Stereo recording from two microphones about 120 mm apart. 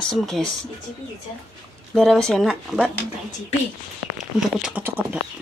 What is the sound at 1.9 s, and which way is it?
Speech, 5° left (ahead or behind).